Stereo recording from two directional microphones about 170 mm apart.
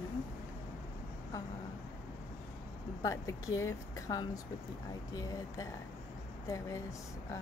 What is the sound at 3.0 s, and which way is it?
Speech, 20° left (ahead or behind).